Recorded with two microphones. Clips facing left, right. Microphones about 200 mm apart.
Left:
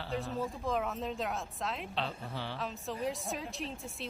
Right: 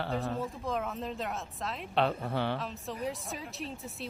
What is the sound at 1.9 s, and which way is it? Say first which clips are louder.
Speech: right 8 dB; 55° right (ahead or behind).